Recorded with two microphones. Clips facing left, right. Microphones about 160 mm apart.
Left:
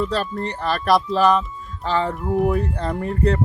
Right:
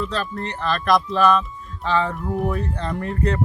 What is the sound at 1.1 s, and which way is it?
Speech, 10° left (ahead or behind).